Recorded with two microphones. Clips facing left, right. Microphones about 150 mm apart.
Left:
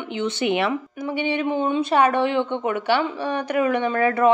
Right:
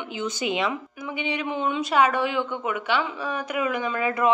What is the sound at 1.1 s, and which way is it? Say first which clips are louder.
A woman's voice: left 6 dB; 30° left (ahead or behind).